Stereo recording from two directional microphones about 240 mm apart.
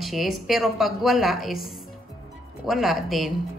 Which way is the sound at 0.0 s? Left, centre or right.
Centre.